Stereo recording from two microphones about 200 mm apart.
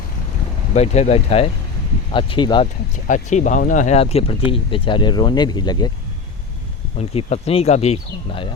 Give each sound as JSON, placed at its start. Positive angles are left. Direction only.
{"t": 0.7, "sound": "speech", "side_deg": 35}
{"t": 2.9, "sound": "speech", "side_deg": 35}
{"t": 7.0, "sound": "speech", "side_deg": 30}